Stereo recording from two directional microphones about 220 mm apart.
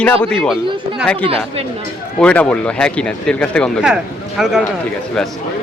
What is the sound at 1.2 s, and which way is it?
Speech, 25° right (ahead or behind).